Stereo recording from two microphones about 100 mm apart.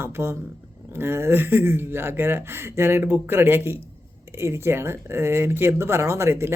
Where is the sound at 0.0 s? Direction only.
25° right (ahead or behind).